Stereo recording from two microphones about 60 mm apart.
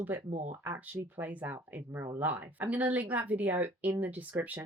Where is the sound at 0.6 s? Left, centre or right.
Right.